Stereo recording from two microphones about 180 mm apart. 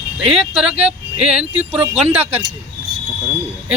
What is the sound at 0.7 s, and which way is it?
Speech, 5° right (ahead or behind).